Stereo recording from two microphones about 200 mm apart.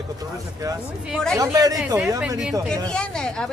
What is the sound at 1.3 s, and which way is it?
Speech, 15° right (ahead or behind).